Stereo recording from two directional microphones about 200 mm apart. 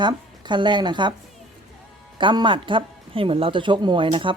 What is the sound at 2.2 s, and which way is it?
Speech, 25° right (ahead or behind).